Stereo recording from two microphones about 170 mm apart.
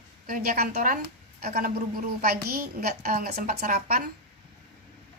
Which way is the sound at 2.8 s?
60° right (ahead or behind).